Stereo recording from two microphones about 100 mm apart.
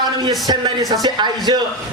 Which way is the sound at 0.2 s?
40° right (ahead or behind).